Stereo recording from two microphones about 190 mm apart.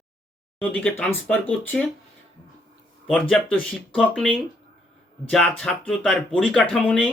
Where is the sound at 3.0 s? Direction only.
5° left (ahead or behind).